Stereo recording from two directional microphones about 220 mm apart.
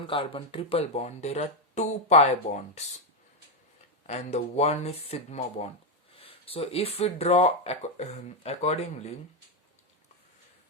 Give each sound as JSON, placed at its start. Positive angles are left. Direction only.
{"t": 0.0, "sound": "speech", "side_deg": 25}
{"t": 4.0, "sound": "speech", "side_deg": 30}